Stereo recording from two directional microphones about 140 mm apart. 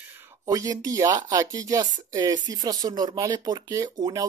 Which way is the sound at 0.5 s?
25° right (ahead or behind).